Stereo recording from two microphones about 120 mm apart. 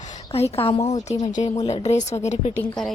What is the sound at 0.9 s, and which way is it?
A woman's voice, 70° left (ahead or behind).